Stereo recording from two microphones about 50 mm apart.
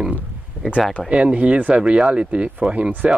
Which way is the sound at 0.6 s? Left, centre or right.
Right.